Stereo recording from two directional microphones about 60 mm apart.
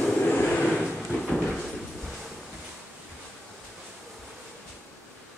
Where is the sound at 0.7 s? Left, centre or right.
Centre.